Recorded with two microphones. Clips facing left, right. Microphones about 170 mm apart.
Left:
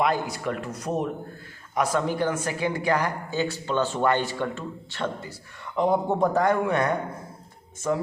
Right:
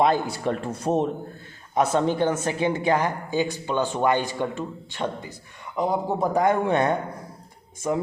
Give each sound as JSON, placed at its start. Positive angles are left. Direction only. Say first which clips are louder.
{"t": 0.0, "sound": "a woman's voice", "louder": "right 3 dB", "side_deg": -30}